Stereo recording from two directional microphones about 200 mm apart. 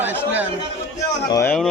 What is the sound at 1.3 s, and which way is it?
Speech, 10° left (ahead or behind).